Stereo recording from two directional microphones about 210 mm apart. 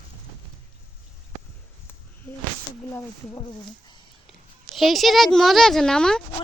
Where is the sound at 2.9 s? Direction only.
10° left (ahead or behind).